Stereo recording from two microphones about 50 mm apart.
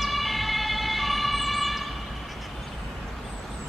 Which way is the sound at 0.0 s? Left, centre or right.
Centre.